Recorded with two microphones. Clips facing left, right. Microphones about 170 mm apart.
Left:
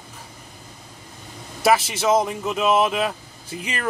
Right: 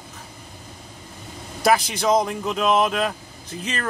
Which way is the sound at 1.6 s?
5° left (ahead or behind).